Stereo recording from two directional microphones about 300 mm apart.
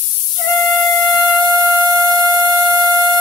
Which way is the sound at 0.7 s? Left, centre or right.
Centre.